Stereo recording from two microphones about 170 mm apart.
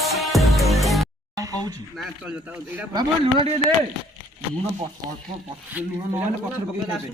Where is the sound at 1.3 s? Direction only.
20° right (ahead or behind).